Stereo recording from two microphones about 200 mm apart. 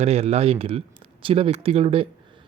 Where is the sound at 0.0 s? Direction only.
30° right (ahead or behind).